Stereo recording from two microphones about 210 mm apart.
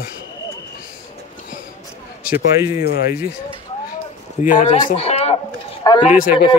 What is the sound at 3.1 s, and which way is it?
Speech, 5° right (ahead or behind).